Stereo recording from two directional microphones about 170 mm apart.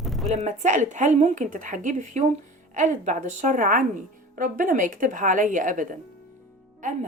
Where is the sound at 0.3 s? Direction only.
40° right (ahead or behind).